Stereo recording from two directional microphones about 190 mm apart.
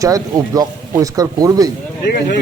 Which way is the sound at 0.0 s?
20° right (ahead or behind).